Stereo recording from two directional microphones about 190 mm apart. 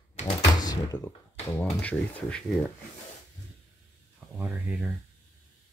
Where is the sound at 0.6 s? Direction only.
15° left (ahead or behind).